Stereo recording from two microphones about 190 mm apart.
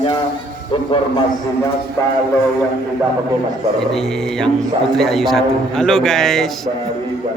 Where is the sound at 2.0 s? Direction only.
15° left (ahead or behind).